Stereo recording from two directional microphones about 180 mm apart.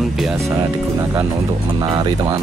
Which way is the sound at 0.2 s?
Centre (ahead or behind).